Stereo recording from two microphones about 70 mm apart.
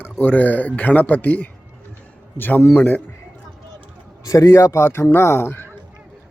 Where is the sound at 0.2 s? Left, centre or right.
Left.